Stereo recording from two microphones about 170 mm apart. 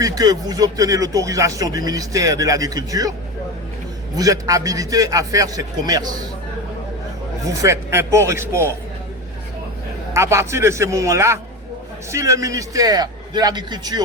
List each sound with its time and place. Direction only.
0.0 s speech: 20° right (ahead or behind)
7.4 s speech: 20° right (ahead or behind)
10.2 s speech: 15° right (ahead or behind)